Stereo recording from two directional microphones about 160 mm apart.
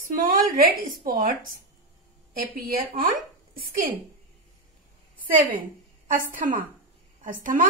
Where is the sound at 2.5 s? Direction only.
70° right (ahead or behind).